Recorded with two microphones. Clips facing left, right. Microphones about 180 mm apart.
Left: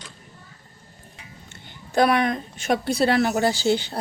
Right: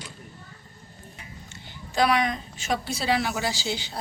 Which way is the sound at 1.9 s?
55° left (ahead or behind).